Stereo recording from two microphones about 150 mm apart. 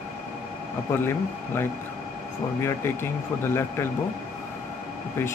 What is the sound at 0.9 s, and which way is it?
Speech, 15° left (ahead or behind).